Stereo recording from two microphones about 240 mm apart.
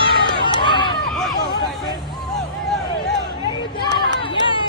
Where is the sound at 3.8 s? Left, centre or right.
Centre.